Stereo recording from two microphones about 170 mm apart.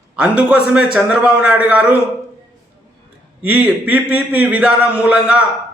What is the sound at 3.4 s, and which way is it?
Speech, 10° right (ahead or behind).